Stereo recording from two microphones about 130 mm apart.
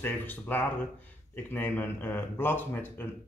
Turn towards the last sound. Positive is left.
turn(degrees=15)  # may be behind; listen again after turning